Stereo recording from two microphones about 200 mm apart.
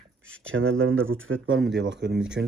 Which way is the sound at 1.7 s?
60° right (ahead or behind).